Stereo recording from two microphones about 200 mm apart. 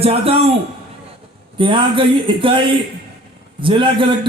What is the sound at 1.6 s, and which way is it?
A man's voice, 25° right (ahead or behind).